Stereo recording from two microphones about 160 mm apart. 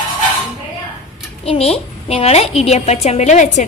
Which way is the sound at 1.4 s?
40° left (ahead or behind).